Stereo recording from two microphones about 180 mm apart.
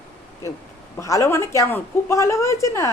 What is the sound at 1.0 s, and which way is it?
A woman's voice, 15° left (ahead or behind).